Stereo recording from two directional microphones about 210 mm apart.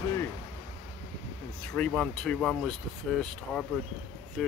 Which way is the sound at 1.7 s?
5° left (ahead or behind).